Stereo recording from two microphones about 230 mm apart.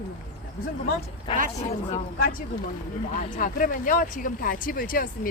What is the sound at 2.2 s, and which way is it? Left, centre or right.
Speech, left.